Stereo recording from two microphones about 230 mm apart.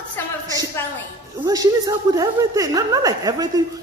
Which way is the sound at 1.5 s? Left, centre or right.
Centre.